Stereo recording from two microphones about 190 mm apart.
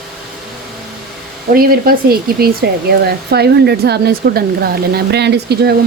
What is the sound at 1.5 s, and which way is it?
Speech, 50° right (ahead or behind).